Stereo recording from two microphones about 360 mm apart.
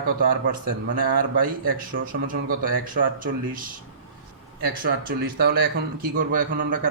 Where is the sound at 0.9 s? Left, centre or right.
Right.